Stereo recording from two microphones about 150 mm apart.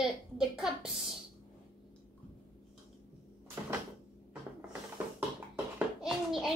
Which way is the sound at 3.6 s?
15° right (ahead or behind).